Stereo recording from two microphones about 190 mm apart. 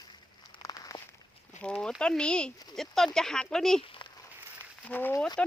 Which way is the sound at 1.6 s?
5° left (ahead or behind).